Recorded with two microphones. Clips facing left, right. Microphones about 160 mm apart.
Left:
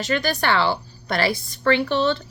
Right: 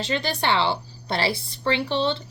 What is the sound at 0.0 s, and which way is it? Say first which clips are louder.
A woman's voice: left 3 dB; 30° right (ahead or behind).